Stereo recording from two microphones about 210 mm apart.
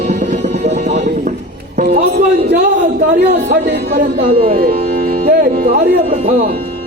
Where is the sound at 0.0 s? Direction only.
35° right (ahead or behind).